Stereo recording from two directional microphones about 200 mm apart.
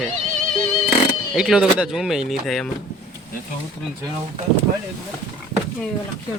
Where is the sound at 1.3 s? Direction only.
5° right (ahead or behind).